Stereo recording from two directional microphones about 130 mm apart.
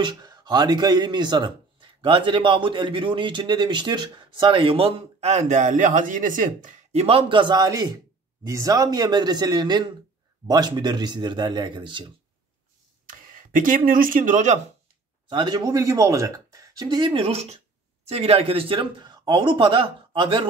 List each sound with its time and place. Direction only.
0.0 s speech: 35° right (ahead or behind); by 6.8 s 90° right
6.9 s speech: 50° right (ahead or behind)
13.0 s speech: 90° right
15.2 s a man's voice: 35° right (ahead or behind)